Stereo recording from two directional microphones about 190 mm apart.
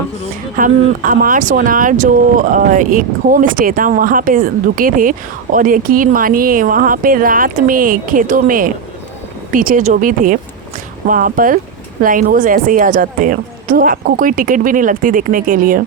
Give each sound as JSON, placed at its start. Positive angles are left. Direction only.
{"t": 0.5, "sound": "speech", "side_deg": -45}